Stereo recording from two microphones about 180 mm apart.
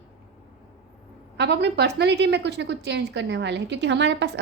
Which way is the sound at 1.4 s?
70° right (ahead or behind).